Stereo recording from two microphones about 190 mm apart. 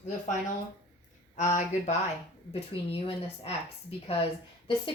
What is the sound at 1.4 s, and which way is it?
Speech, 40° left (ahead or behind).